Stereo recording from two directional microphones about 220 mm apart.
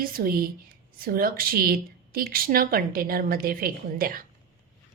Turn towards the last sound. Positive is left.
turn(degrees=-40)  # may be behind; listen again after turning